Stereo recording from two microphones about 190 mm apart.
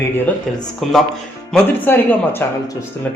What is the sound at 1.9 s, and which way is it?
Speech, 10° left (ahead or behind).